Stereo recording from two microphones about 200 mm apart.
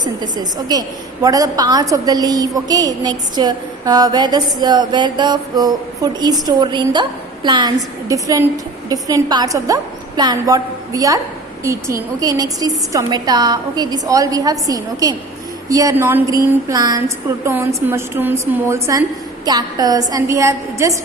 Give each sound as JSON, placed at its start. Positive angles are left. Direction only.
{"t": 0.0, "sound": "a woman's voice", "side_deg": -20}